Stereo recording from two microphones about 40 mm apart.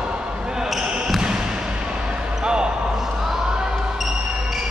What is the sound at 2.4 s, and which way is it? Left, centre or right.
Basketball bounce, right.